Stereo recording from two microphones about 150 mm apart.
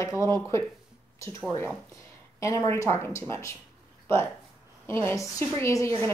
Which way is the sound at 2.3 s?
20° left (ahead or behind).